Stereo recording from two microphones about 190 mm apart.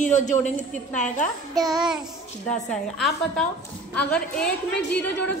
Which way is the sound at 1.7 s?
5° right (ahead or behind).